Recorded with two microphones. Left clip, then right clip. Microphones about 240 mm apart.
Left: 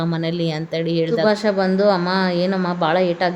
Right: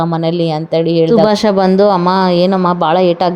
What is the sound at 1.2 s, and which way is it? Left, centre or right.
Speech, right.